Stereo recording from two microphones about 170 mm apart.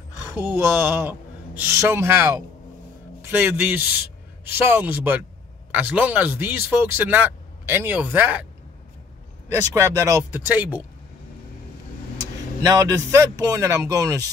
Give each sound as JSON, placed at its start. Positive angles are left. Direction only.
{"t": 0.3, "sound": "a man's voice", "side_deg": -15}
{"t": 9.8, "sound": "speech", "side_deg": -15}
{"t": 12.2, "sound": "speech", "side_deg": -20}